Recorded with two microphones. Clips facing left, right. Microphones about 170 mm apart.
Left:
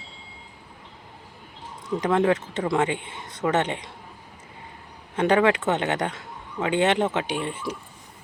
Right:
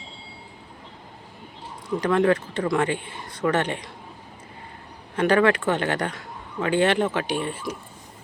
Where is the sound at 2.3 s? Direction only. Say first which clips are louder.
Right 1 dB; 20° left (ahead or behind).